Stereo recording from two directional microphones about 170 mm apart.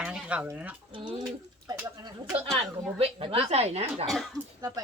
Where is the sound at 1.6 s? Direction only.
25° right (ahead or behind).